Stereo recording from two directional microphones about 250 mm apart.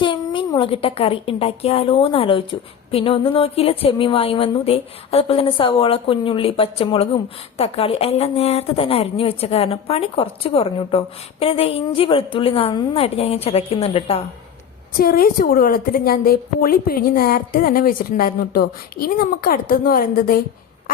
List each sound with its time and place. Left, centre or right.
0.0 s a woman's voice: centre
14.9 s a woman's voice: left